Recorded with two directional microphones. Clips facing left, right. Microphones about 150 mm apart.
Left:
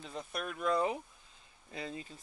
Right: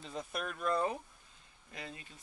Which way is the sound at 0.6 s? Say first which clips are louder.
Left 2 dB; 15° left (ahead or behind).